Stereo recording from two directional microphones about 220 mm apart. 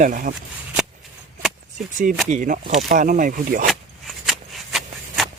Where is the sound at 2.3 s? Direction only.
35° right (ahead or behind).